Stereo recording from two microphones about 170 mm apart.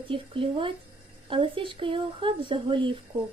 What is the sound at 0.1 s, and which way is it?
Speech, 30° right (ahead or behind).